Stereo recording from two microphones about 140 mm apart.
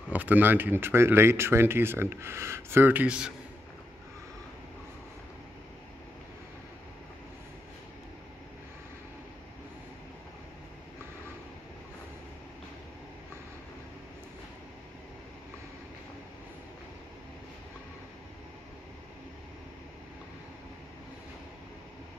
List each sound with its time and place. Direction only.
0.1 s speech: 10° right (ahead or behind)